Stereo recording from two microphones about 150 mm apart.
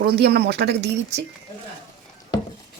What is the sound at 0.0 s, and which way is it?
Speech, 90° right.